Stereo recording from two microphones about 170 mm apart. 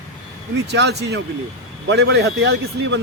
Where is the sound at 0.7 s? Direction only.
80° right.